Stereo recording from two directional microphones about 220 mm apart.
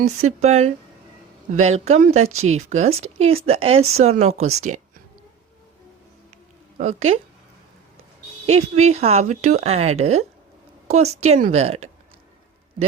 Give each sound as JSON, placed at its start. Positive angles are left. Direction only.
{"t": 0.0, "sound": "speech", "side_deg": -75}
{"t": 0.4, "sound": "speech", "side_deg": -30}
{"t": 2.2, "sound": "speech", "side_deg": -70}
{"t": 2.6, "sound": "speech", "side_deg": -30}
{"t": 6.7, "sound": "speech", "side_deg": -30}
{"t": 8.4, "sound": "speech", "side_deg": -30}